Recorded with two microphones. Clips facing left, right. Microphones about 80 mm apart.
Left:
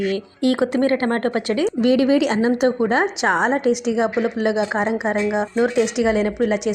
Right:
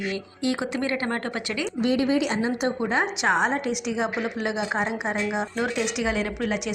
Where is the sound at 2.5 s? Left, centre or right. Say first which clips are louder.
Left 7 dB; left.